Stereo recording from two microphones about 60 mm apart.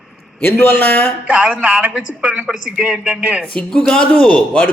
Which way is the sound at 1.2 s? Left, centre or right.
Centre.